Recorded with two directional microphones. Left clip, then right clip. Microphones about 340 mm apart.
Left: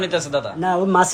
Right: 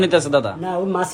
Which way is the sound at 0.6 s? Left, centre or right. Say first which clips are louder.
Left 5 dB; left.